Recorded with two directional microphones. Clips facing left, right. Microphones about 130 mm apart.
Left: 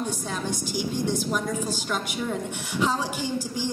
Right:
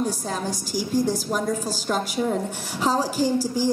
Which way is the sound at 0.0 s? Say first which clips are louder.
Right 4 dB; 35° right (ahead or behind).